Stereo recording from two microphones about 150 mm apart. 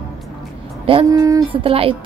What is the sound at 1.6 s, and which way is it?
Speech, 40° right (ahead or behind).